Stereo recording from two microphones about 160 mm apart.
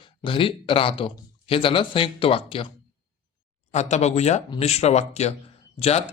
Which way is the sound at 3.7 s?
45° left (ahead or behind).